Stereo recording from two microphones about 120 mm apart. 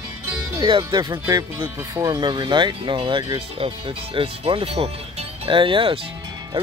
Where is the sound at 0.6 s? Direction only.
40° right (ahead or behind).